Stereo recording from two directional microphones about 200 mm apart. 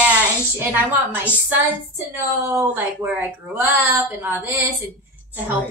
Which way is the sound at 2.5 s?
10° right (ahead or behind).